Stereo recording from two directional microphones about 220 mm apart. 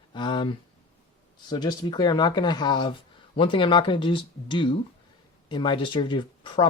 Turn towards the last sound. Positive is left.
turn(degrees=20)  # may be behind; listen again after turning